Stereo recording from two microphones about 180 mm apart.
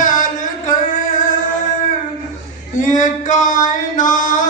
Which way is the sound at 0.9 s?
45° left (ahead or behind).